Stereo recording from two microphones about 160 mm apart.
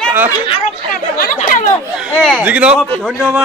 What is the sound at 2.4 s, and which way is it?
Speech, 10° right (ahead or behind).